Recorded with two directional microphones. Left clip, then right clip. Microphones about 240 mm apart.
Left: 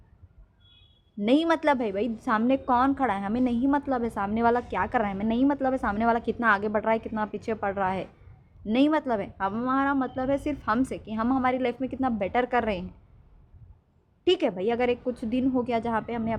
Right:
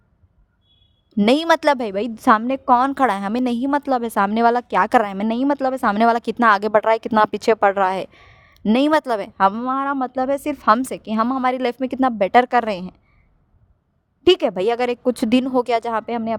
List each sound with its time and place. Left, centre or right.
1.2 s a woman's voice: right
14.3 s a woman's voice: right